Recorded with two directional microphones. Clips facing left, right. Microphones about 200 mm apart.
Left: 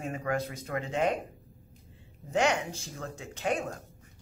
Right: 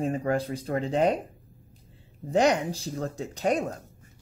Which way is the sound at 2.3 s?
35° right (ahead or behind).